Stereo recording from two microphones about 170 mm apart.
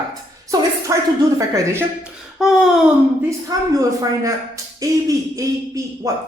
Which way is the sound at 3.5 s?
20° right (ahead or behind).